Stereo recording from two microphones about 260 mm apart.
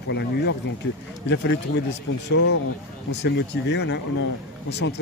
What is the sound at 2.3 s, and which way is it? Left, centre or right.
Speech, left.